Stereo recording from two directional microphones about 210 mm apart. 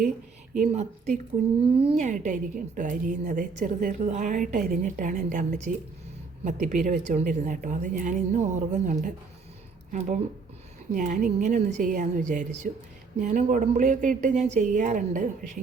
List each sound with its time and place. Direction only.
0.6 s a woman's voice: 35° right (ahead or behind)
10.9 s a woman's voice: 40° right (ahead or behind)